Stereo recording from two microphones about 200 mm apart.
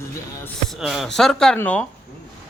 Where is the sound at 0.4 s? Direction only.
Centre (ahead or behind).